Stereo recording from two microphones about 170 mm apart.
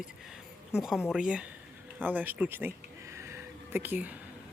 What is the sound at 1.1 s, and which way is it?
Speech, 5° right (ahead or behind).